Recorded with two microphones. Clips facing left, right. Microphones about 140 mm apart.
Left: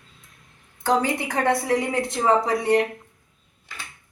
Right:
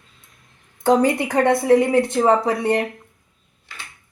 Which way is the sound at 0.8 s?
30° right (ahead or behind).